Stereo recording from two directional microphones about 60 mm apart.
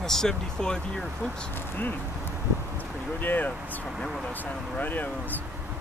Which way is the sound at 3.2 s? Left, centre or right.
Left.